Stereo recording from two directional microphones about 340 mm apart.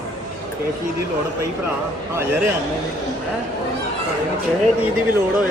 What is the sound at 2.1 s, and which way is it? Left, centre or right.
Speech, centre.